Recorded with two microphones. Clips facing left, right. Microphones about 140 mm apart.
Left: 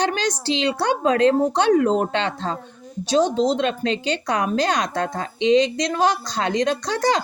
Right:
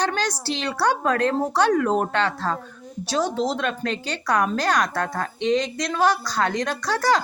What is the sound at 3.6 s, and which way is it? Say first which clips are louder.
Speech: left 4 dB; 50° right (ahead or behind).